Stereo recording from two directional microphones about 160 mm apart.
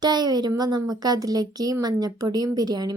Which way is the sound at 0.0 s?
25° right (ahead or behind).